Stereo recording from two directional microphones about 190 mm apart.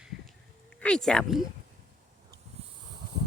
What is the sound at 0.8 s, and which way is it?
Speech, 5° left (ahead or behind).